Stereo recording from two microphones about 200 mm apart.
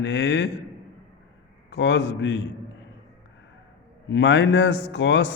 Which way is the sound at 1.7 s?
65° left (ahead or behind).